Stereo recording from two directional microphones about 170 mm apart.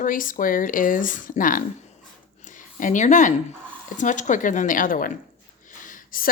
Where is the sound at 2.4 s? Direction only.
50° left (ahead or behind).